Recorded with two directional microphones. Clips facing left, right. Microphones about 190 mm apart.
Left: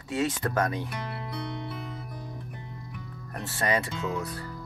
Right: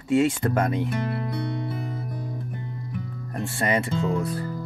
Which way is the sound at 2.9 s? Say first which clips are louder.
Right 8 dB; 30° right (ahead or behind).